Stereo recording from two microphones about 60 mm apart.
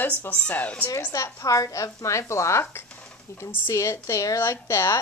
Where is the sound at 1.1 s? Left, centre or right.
Left.